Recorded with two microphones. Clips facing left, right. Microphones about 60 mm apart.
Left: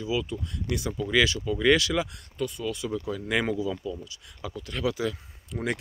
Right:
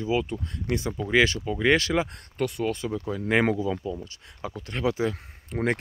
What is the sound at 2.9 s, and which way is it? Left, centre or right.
Speech, right.